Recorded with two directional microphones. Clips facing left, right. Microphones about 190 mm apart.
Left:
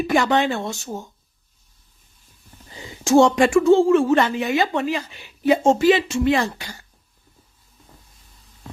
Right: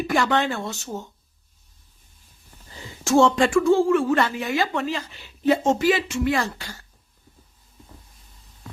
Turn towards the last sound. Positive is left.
turn(degrees=15)  # may be behind; listen again after turning